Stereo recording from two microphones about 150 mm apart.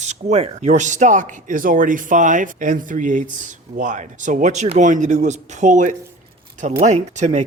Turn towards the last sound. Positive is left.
turn(degrees=-50)  # may be behind; listen again after turning